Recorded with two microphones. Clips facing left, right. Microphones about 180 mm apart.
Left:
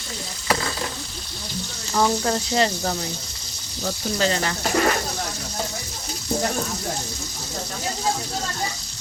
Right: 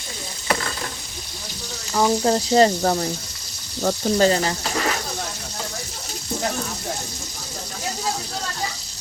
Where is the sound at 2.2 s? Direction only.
35° right (ahead or behind).